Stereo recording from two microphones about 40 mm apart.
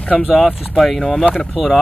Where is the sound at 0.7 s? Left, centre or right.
Centre.